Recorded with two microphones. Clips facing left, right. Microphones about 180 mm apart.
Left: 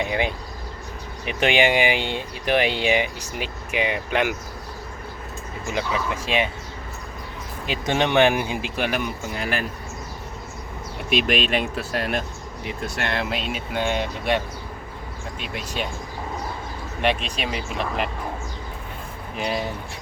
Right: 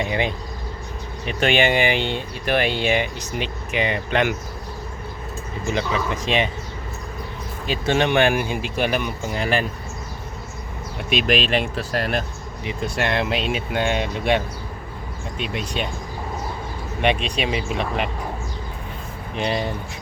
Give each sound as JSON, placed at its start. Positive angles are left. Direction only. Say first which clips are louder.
{"t": 0.0, "sound": "speech", "louder": "right 1 dB", "side_deg": 10}
{"t": 5.7, "sound": "speech", "louder": "right 1 dB", "side_deg": 10}
{"t": 7.7, "sound": "speech", "louder": "right 2 dB", "side_deg": 15}
{"t": 9.3, "sound": "speech", "louder": "right 6 dB", "side_deg": 5}
{"t": 11.1, "sound": "speech", "louder": "right 1 dB", "side_deg": 0}
{"t": 15.5, "sound": "speech", "louder": "right 1 dB", "side_deg": 0}
{"t": 17.2, "sound": "speech", "louder": "right 5 dB", "side_deg": 0}
{"t": 19.4, "sound": "speech", "louder": "right 3 dB", "side_deg": 5}